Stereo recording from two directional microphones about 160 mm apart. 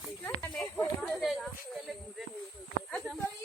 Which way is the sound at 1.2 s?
Centre (ahead or behind).